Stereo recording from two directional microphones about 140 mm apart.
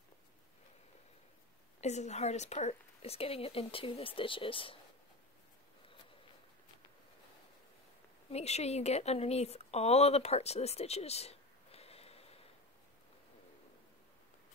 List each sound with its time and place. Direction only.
1.8 s speech: 55° left (ahead or behind)
8.3 s a woman's voice: 50° left (ahead or behind)